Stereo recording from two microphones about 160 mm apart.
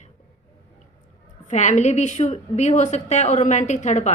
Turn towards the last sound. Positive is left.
turn(degrees=45)  # may be behind; listen again after turning